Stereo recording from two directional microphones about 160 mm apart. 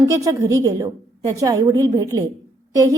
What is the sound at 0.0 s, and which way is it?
A woman's voice, 20° right (ahead or behind).